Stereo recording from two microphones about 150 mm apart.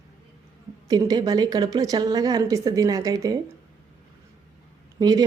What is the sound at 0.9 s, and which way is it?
Speech, 25° right (ahead or behind).